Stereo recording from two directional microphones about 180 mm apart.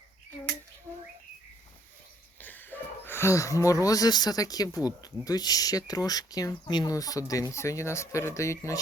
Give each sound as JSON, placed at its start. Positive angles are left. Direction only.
{"t": 2.4, "sound": "speech", "side_deg": 10}